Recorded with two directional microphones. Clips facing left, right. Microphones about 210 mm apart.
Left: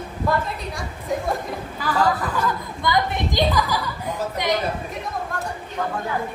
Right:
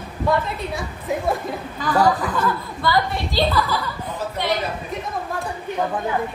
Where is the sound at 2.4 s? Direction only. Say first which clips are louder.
Right 2 dB; 20° left (ahead or behind).